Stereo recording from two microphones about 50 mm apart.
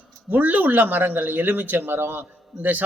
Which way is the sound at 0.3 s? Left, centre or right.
Right.